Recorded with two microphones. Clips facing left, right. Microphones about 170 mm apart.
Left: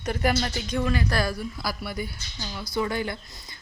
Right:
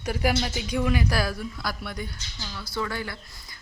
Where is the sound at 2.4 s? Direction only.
15° left (ahead or behind).